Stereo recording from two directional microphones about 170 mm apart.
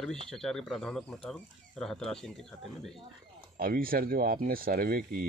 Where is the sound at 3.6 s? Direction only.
55° right (ahead or behind).